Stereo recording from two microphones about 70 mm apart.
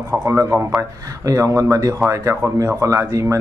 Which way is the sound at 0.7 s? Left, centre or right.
Right.